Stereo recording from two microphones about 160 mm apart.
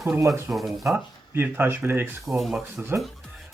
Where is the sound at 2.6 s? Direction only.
15° right (ahead or behind).